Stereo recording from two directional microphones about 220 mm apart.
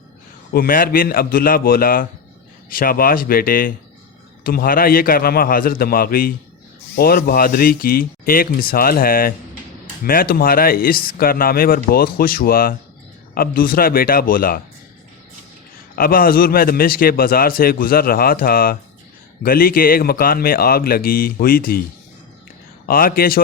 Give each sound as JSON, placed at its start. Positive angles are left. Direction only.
{"t": 0.5, "sound": "a man's voice", "side_deg": 40}
{"t": 16.0, "sound": "a man's voice", "side_deg": 40}
{"t": 22.9, "sound": "a man's voice", "side_deg": 40}